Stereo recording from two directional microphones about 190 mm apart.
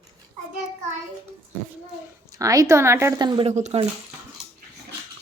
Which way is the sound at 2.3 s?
15° right (ahead or behind).